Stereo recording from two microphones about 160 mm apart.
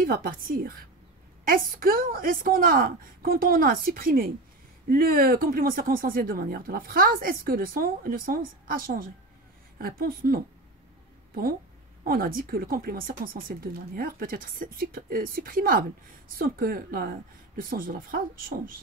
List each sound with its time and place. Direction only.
0.0 s speech: 65° right (ahead or behind)
12.0 s speech: 65° right (ahead or behind)